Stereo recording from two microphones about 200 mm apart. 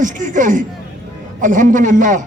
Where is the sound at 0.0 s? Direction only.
40° right (ahead or behind).